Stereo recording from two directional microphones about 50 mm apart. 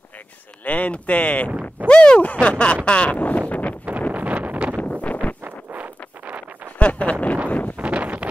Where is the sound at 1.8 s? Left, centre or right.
Centre.